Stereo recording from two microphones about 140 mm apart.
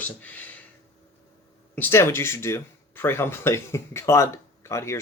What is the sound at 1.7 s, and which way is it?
Speech, 15° left (ahead or behind).